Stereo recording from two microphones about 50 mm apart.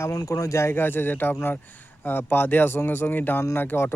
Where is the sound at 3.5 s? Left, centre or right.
Left.